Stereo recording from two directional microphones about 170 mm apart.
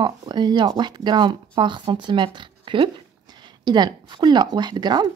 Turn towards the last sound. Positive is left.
turn(degrees=-25)  # may be behind; listen again after turning